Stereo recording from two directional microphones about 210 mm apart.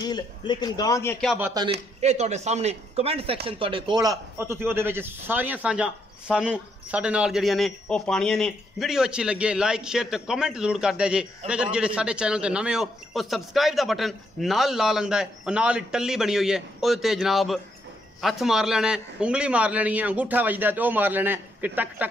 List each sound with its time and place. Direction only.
0.0 s a man's voice: 20° left (ahead or behind)
1.2 s speech: centre (ahead or behind)
2.0 s a man's voice: 30° right (ahead or behind); by 22.0 s 10° right (ahead or behind)